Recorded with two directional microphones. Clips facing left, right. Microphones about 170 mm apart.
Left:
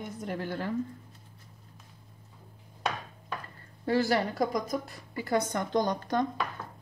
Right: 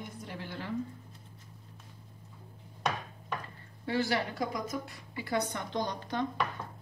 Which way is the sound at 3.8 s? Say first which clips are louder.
Left 5 dB; 40° left (ahead or behind).